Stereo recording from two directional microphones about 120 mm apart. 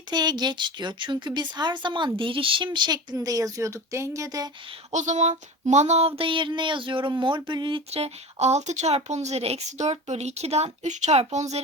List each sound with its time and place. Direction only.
0.1 s speech: 35° right (ahead or behind)
4.9 s speech: 80° right; by 7.8 s 40° right (ahead or behind)
7.9 s speech: 60° right (ahead or behind)